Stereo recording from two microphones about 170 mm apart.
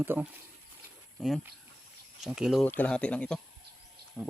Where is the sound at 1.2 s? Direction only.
Centre (ahead or behind).